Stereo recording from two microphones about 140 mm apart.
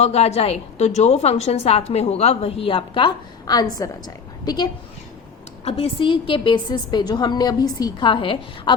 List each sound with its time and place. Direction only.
0.0 s a woman's voice: 50° left (ahead or behind); by 4.7 s 30° left (ahead or behind)
5.6 s a woman's voice: 45° left (ahead or behind)